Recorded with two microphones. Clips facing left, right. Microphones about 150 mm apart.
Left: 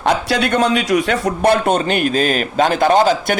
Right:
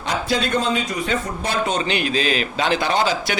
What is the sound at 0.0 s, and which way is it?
A man's voice, 70° left (ahead or behind).